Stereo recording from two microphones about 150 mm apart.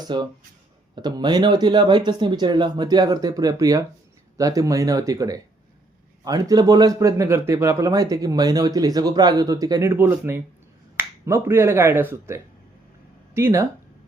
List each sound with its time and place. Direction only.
0.0 s speech: 30° right (ahead or behind)